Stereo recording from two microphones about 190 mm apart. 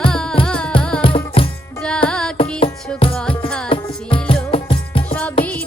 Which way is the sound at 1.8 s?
5° left (ahead or behind).